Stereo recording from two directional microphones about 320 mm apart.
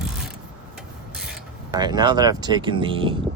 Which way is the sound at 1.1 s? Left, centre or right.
Centre.